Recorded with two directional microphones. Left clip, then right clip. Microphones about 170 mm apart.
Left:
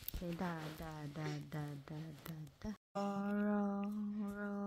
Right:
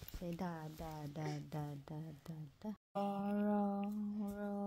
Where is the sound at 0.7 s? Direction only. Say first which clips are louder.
Right 1 dB; 5° right (ahead or behind).